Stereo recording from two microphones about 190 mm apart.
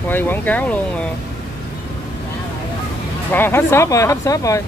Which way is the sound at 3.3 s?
10° left (ahead or behind).